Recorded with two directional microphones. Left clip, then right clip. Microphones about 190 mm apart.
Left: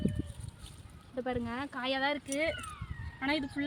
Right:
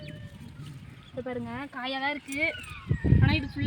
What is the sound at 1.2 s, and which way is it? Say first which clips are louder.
Speech: even; 5° right (ahead or behind).